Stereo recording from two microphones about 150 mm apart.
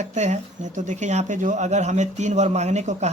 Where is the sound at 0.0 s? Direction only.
50° right (ahead or behind).